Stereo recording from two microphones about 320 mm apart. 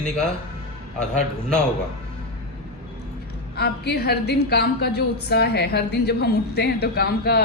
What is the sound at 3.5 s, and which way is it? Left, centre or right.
A woman's voice, left.